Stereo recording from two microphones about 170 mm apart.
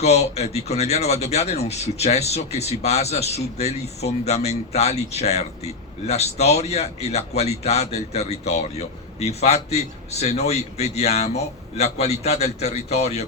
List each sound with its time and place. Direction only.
0.0 s speech: 40° left (ahead or behind)